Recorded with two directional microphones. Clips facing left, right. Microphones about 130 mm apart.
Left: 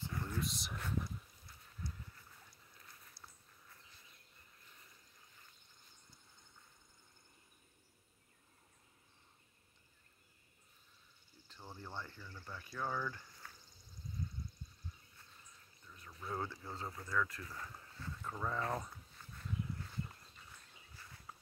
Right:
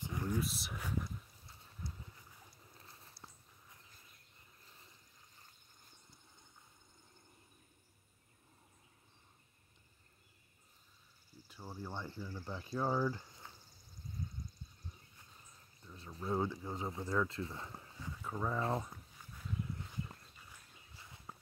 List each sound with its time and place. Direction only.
0.0 s a sound: 15° right (ahead or behind)
1.5 s horse: 25° right (ahead or behind)
11.4 s speech: 10° right (ahead or behind)
12.2 s speech: 30° right (ahead or behind)
15.8 s a sound: 30° right (ahead or behind)
16.3 s speech: 15° right (ahead or behind)
18.8 s dog: 10° right (ahead or behind)